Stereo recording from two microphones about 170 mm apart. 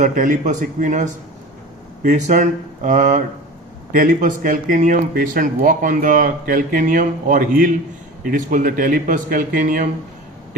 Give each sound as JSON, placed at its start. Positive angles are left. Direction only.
{"t": 0.0, "sound": "speech", "side_deg": -50}